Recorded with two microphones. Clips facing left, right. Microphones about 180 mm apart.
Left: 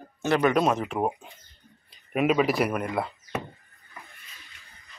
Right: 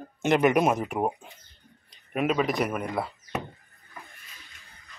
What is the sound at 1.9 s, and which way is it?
Speech, 5° left (ahead or behind).